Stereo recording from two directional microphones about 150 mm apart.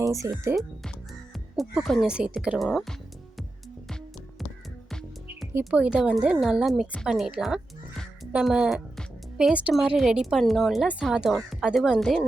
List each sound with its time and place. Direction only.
0.0 s speech: 20° right (ahead or behind)
0.5 s a woman's voice: centre (ahead or behind)
5.5 s a woman's voice: 10° right (ahead or behind)